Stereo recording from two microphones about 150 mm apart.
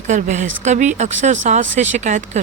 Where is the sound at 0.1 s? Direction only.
55° right (ahead or behind).